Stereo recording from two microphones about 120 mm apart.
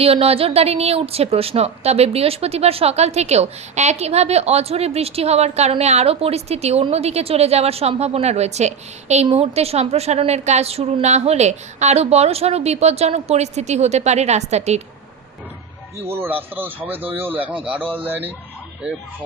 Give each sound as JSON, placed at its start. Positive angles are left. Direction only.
{"t": 0.0, "sound": "a woman's voice", "side_deg": -55}
{"t": 16.0, "sound": "speech", "side_deg": -20}